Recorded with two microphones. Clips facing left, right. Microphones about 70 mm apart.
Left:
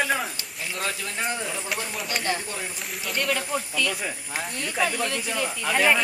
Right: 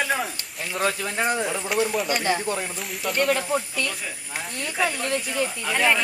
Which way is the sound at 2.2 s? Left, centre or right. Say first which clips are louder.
Right 4 dB; centre.